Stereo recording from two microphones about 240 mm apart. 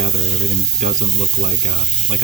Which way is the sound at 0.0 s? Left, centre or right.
Right.